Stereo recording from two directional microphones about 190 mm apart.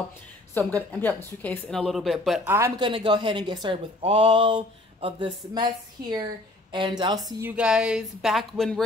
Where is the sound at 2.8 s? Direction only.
25° right (ahead or behind).